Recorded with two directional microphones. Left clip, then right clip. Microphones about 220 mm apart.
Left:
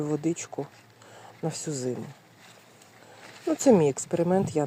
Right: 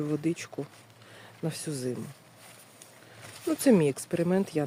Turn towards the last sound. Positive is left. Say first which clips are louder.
# left 3 dB
turn(degrees=-5)  # may be behind; listen again after turning